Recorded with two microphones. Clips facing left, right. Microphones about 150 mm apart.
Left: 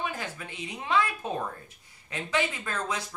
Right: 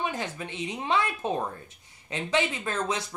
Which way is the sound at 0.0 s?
25° right (ahead or behind).